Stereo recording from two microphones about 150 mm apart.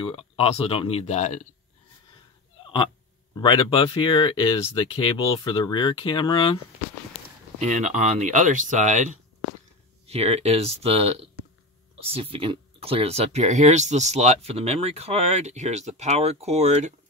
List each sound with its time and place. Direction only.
0.0 s speech: 40° left (ahead or behind)
3.3 s speech: 35° left (ahead or behind)
7.6 s speech: 55° right (ahead or behind)
10.0 s speech: 45° right (ahead or behind)